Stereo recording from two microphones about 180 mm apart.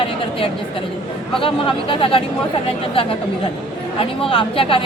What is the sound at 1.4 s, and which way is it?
Speech, 30° left (ahead or behind).